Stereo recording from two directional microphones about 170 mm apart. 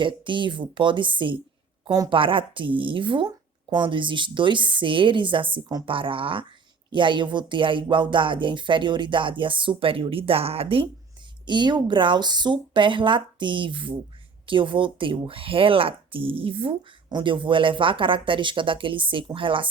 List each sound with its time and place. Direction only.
0.0 s speech: 30° right (ahead or behind)